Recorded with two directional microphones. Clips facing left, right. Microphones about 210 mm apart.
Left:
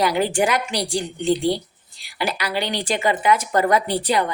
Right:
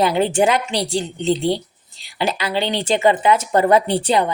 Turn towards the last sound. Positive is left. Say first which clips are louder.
# right 3 dB
turn(degrees=-25)  # may be behind; listen again after turning